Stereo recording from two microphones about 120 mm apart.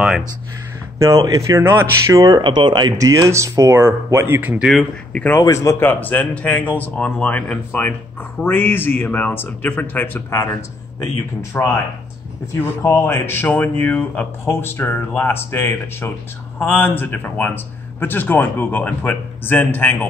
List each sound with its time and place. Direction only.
0.9 s speech: 25° right (ahead or behind)
2.4 s speech: 40° right (ahead or behind); by 4.6 s 15° right (ahead or behind)
4.6 s speech: 5° left (ahead or behind)
5.4 s speech: 25° left (ahead or behind)